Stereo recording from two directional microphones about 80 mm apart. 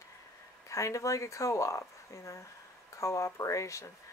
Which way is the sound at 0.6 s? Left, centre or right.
Left.